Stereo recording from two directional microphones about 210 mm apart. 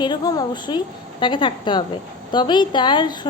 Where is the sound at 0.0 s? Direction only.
20° left (ahead or behind).